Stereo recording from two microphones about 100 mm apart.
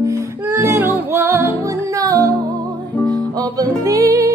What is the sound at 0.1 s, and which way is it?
Music, 25° right (ahead or behind).